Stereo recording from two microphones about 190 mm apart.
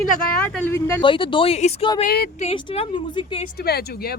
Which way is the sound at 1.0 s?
25° left (ahead or behind).